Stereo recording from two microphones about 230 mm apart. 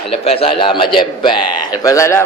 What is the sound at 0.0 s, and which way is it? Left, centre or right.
A man's voice, left.